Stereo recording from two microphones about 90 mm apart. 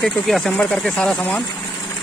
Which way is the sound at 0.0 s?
5° left (ahead or behind).